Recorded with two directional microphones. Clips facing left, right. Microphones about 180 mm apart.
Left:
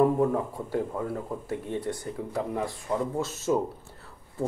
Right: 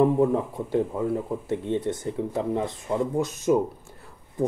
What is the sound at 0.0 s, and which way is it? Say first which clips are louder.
Speech: right 3 dB; 20° right (ahead or behind).